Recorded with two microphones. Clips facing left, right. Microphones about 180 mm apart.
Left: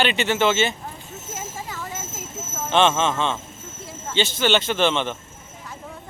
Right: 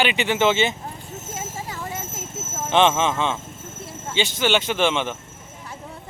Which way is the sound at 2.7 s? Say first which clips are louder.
Right 1 dB; 15° right (ahead or behind).